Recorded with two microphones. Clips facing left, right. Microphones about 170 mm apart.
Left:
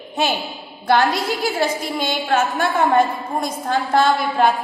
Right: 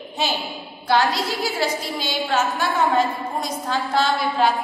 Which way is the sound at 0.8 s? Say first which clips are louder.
Left 3 dB; 55° left (ahead or behind).